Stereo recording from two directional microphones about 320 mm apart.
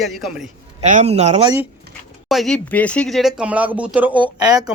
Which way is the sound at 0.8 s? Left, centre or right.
Right.